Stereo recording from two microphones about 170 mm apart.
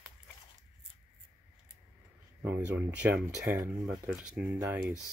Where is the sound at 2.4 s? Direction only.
10° right (ahead or behind).